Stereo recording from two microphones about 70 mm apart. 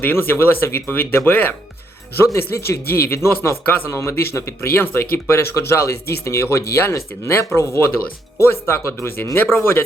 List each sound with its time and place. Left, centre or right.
0.0 s speech: left